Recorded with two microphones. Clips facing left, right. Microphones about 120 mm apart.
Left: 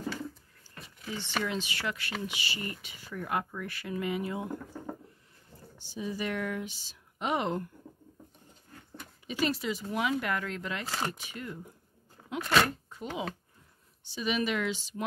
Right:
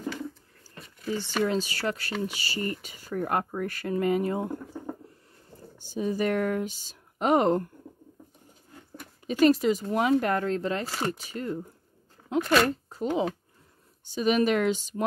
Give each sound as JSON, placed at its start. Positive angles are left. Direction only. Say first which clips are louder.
{"t": 0.7, "sound": "a sound", "louder": "right 8 dB", "side_deg": 0}
{"t": 1.4, "sound": "speech", "louder": "right 9 dB", "side_deg": -40}
{"t": 5.8, "sound": "speech", "louder": "right 8 dB", "side_deg": -45}
{"t": 9.3, "sound": "speech", "louder": "right 10 dB", "side_deg": -45}